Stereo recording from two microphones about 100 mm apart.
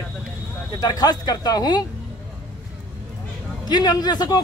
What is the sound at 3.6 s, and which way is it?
Speech, 45° left (ahead or behind).